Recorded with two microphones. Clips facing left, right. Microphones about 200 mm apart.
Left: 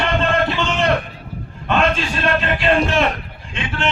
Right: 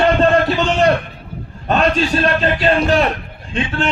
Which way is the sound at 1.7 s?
35° right (ahead or behind).